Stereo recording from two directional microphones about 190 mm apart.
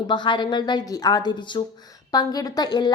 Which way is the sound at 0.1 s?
25° left (ahead or behind).